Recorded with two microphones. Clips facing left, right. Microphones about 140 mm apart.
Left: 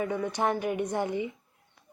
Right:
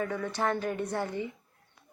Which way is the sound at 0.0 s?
15° left (ahead or behind).